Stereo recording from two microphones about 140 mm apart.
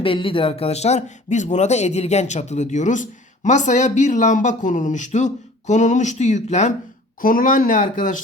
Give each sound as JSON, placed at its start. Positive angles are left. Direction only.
{"t": 0.0, "sound": "speech", "side_deg": 40}
{"t": 7.2, "sound": "speech", "side_deg": 80}